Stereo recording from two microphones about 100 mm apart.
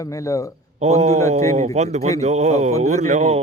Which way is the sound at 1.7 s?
90° right.